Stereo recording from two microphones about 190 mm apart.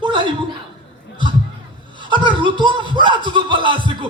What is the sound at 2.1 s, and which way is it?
Speech, 25° right (ahead or behind).